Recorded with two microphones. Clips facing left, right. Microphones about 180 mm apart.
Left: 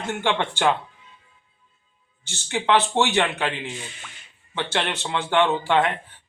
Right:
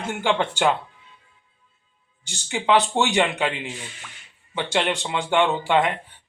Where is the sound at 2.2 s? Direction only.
10° right (ahead or behind).